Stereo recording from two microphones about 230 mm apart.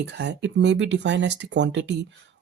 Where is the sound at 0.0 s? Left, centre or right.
Right.